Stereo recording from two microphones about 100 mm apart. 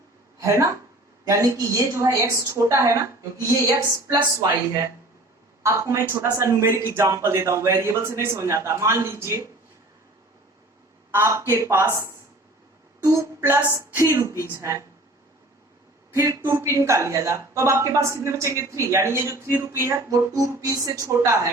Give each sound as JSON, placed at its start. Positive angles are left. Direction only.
{"t": 0.3, "sound": "speech", "side_deg": -30}
{"t": 5.6, "sound": "speech", "side_deg": -30}
{"t": 11.1, "sound": "a woman's voice", "side_deg": -25}
{"t": 13.4, "sound": "a sound", "side_deg": -15}
{"t": 13.7, "sound": "speech", "side_deg": -30}
{"t": 16.1, "sound": "a sound", "side_deg": -30}
{"t": 16.4, "sound": "speech", "side_deg": -25}